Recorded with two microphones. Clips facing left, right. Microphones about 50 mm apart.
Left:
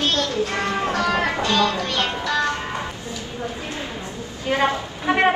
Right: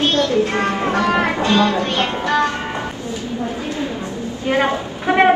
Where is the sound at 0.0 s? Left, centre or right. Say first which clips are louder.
Right 6 dB; right.